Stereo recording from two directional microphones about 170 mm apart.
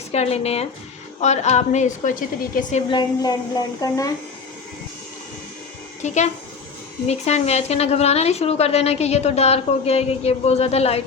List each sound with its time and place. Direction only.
0.1 s a woman's voice: 40° left (ahead or behind)
2.9 s speech: 25° left (ahead or behind)
6.0 s a woman's voice: 45° left (ahead or behind)